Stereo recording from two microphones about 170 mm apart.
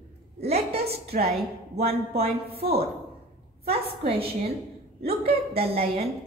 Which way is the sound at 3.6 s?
35° right (ahead or behind).